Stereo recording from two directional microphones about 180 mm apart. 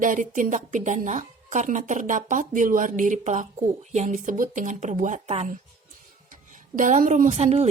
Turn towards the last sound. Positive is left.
turn(degrees=-40)  # may be behind; listen again after turning